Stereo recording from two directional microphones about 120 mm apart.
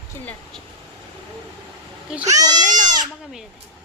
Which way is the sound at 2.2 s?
30° right (ahead or behind).